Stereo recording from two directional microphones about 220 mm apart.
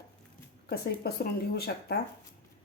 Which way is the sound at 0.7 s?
45° left (ahead or behind).